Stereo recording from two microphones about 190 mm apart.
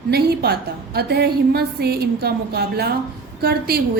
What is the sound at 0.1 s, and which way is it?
A woman's voice, 55° right (ahead or behind).